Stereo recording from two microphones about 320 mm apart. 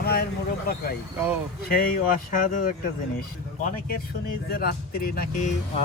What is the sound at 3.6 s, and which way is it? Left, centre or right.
A man's voice, left.